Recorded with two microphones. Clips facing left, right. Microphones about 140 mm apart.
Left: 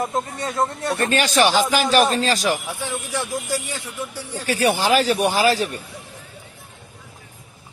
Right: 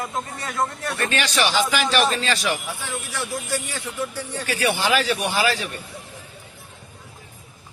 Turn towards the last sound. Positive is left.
turn(degrees=40)  # may be behind; listen again after turning